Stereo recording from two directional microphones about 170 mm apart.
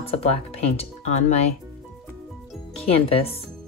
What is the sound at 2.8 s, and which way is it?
Speech, 35° left (ahead or behind).